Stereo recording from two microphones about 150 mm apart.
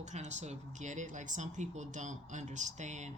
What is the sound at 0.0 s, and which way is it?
Speech, 50° right (ahead or behind).